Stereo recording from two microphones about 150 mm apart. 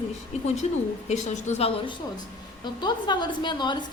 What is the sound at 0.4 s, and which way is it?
A woman's voice, 50° left (ahead or behind).